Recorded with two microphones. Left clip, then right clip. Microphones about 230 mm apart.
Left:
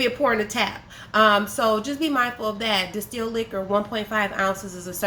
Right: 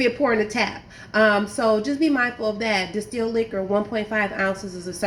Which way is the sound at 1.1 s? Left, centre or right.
Left.